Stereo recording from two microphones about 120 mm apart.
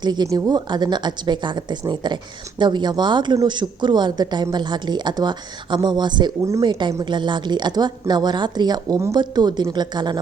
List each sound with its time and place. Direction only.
0.0 s speech: 35° right (ahead or behind)